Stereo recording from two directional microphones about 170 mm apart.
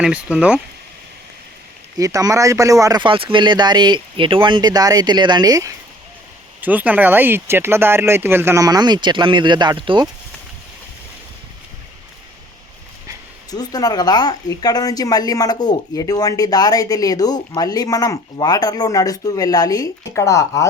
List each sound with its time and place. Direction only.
0.0 s speech: 5° right (ahead or behind)
2.0 s speech: 20° right (ahead or behind)
6.6 s speech: 10° right (ahead or behind); by 10.1 s 30° right (ahead or behind)
13.5 s speech: 20° left (ahead or behind)